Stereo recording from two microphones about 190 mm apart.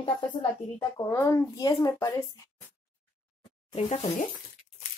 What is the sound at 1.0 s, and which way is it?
Speech, 15° left (ahead or behind).